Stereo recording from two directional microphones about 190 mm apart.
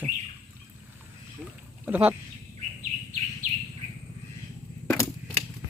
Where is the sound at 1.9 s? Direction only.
10° right (ahead or behind).